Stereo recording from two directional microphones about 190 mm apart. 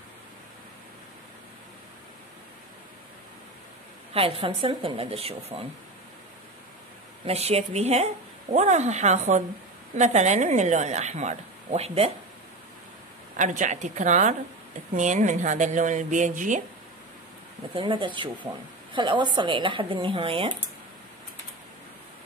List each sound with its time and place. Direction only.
4.1 s speech: 30° right (ahead or behind)
7.2 s a woman's voice: 35° right (ahead or behind)
13.4 s a woman's voice: 40° right (ahead or behind)
17.7 s speech: 25° right (ahead or behind)